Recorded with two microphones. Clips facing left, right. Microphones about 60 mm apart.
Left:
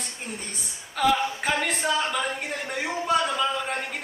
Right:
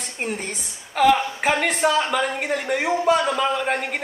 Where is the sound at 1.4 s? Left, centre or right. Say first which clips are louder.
Right 6 dB; right.